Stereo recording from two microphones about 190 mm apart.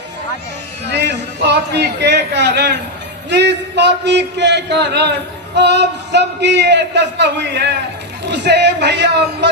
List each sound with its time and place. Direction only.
0.9 s a man's voice: 65° right (ahead or behind)